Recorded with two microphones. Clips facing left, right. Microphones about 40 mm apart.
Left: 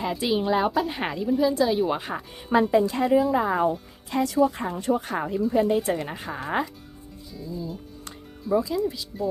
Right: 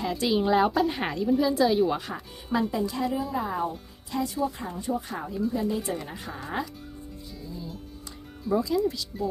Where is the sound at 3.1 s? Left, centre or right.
Left.